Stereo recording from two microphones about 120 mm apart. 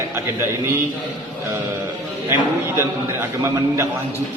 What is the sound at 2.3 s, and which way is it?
A man's voice, 20° right (ahead or behind).